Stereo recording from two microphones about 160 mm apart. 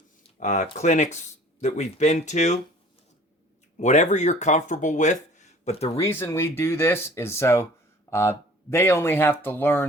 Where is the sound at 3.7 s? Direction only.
50° left (ahead or behind).